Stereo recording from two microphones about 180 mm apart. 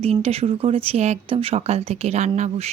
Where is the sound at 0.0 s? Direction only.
35° right (ahead or behind).